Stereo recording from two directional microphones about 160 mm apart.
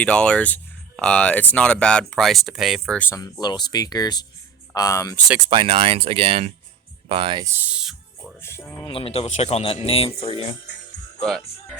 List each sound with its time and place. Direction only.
0.0 s speech: 5° left (ahead or behind)
3.4 s speech: 25° left (ahead or behind)
5.4 s speech: 30° right (ahead or behind)
7.4 s music: 10° right (ahead or behind)
8.4 s music: 15° left (ahead or behind)
8.8 s speech: 35° left (ahead or behind)
11.2 s speech: centre (ahead or behind)